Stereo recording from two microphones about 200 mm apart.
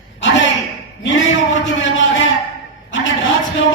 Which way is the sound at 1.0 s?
65° left (ahead or behind).